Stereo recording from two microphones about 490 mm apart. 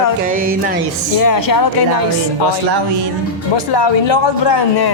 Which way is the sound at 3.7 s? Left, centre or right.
Left.